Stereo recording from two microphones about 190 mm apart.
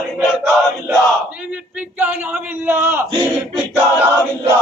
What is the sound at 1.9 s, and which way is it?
A man's voice, 10° right (ahead or behind).